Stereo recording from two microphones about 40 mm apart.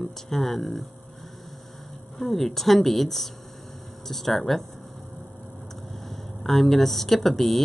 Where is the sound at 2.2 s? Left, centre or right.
Centre.